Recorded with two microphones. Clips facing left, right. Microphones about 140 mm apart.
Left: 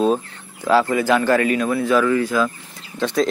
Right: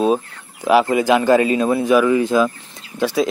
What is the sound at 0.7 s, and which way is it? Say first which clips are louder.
A man's voice: right 2 dB; 15° right (ahead or behind).